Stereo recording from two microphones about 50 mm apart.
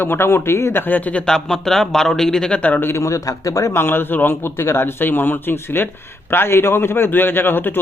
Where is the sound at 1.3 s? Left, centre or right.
Centre.